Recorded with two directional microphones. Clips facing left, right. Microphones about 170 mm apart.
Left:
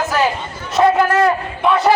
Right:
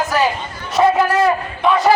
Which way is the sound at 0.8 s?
Centre (ahead or behind).